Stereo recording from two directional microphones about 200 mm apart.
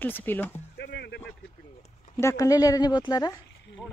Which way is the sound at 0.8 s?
55° left (ahead or behind).